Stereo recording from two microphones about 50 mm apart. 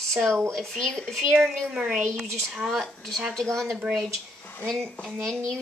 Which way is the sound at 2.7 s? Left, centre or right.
Centre.